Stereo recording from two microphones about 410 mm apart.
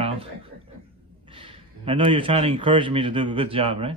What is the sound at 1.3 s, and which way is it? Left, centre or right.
A man's voice, centre.